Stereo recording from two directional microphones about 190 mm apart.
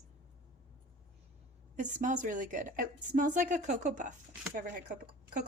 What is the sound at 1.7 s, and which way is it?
A woman's voice, 40° right (ahead or behind).